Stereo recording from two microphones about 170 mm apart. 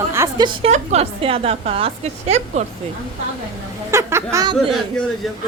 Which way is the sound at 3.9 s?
15° right (ahead or behind).